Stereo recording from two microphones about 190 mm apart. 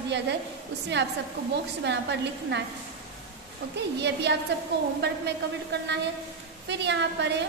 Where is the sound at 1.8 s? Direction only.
65° right (ahead or behind).